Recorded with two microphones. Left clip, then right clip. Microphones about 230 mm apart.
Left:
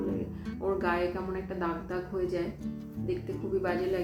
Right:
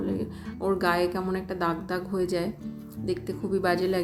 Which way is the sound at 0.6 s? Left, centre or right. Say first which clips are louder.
Right 5 dB; right.